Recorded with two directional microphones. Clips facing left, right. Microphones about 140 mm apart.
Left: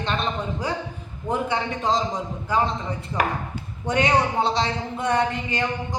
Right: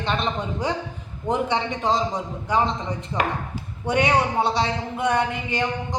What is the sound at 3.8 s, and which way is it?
Speech, 10° right (ahead or behind).